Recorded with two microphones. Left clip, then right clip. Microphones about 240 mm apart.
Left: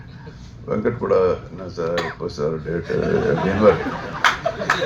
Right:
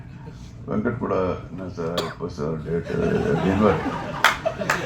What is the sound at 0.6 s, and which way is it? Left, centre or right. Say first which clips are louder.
Speech: left 5 dB; left.